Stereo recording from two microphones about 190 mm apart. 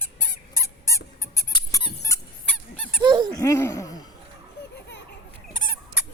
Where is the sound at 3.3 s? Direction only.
15° left (ahead or behind).